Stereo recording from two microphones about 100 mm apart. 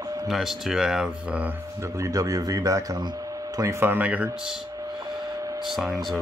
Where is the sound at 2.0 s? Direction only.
35° right (ahead or behind); by 4.3 s 15° right (ahead or behind).